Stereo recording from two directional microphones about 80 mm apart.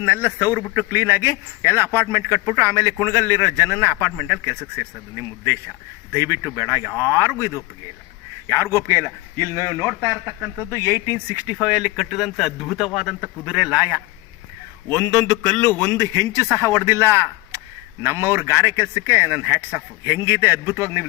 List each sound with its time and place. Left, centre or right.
0.0 s a man's voice: right
6.4 s speech: right
6.9 s speech: left
7.2 s a man's voice: right
11.5 s speech: centre
13.4 s a man's voice: centre
15.0 s a man's voice: right
16.8 s a man's voice: right